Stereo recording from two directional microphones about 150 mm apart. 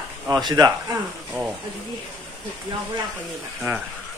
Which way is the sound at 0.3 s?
30° right (ahead or behind).